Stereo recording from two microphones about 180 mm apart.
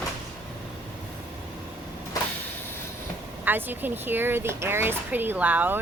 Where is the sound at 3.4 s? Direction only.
10° right (ahead or behind).